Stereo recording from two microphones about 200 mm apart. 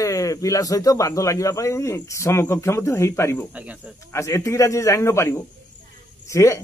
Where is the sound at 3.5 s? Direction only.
5° right (ahead or behind).